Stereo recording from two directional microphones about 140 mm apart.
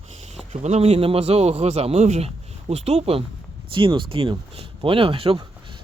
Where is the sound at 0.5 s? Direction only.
50° right (ahead or behind).